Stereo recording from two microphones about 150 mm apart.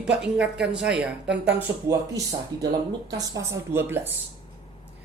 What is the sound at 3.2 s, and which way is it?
Speech, 25° right (ahead or behind).